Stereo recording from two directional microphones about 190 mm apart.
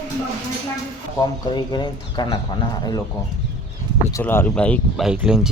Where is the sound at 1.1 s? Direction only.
20° left (ahead or behind).